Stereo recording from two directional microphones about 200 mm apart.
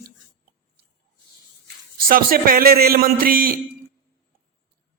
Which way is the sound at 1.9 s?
45° right (ahead or behind).